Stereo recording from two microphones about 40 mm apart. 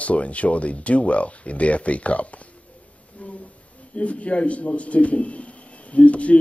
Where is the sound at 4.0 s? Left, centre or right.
Left.